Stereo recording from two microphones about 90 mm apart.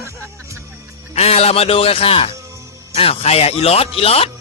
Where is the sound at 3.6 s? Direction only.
90° left.